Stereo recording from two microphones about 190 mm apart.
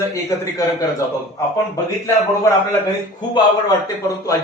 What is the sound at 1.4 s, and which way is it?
Speech, 15° left (ahead or behind).